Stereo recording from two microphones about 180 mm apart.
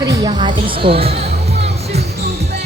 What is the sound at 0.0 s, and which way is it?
Music, 20° right (ahead or behind).